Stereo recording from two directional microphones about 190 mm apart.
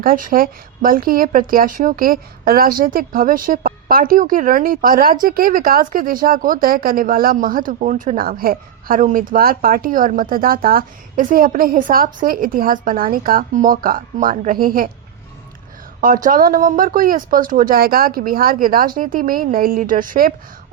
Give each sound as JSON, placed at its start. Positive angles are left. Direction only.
{"t": 0.0, "sound": "speech", "side_deg": -45}
{"t": 16.0, "sound": "speech", "side_deg": -45}